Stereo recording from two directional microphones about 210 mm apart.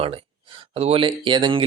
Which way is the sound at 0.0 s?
25° right (ahead or behind).